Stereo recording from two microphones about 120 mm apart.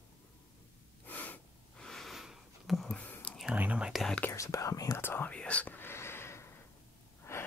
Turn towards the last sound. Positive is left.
turn(degrees=20)  # may be behind; listen again after turning